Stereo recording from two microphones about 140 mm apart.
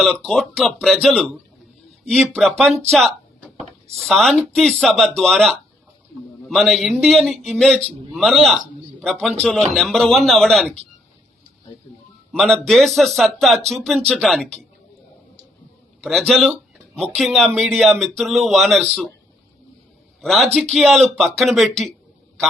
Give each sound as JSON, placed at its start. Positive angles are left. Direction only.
{"t": 0.0, "sound": "speech", "side_deg": 5}
{"t": 2.9, "sound": "a sound", "side_deg": 5}
{"t": 4.0, "sound": "speech", "side_deg": 0}
{"t": 12.3, "sound": "speech", "side_deg": 5}
{"t": 16.0, "sound": "speech", "side_deg": 0}
{"t": 20.2, "sound": "speech", "side_deg": 0}